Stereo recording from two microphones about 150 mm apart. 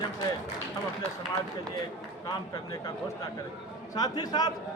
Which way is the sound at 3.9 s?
25° left (ahead or behind).